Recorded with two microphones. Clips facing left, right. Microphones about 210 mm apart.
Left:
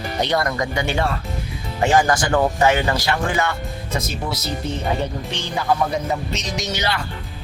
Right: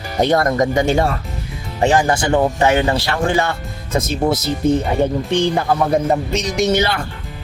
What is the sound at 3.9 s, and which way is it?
Speech, 50° right (ahead or behind).